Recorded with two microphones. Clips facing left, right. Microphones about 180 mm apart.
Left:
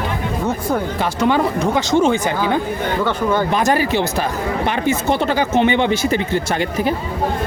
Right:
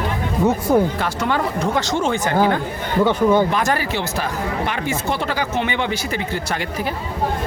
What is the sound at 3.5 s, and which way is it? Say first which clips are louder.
Speech: left 4 dB; 20° left (ahead or behind).